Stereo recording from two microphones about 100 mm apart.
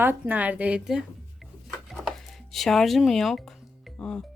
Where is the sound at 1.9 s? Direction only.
Centre (ahead or behind).